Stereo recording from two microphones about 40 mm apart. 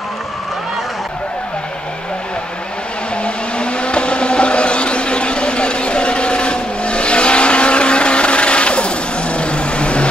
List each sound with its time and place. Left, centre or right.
3.5 s vehicle: left